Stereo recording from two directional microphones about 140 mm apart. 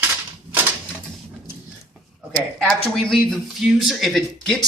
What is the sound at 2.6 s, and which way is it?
Speech, centre (ahead or behind).